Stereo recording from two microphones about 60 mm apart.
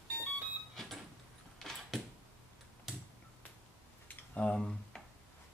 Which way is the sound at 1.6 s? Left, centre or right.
Centre.